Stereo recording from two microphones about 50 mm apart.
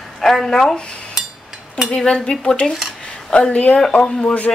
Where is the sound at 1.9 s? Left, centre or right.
Centre.